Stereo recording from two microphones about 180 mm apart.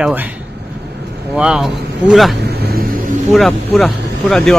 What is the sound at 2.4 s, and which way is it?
Vehicle, 60° right (ahead or behind).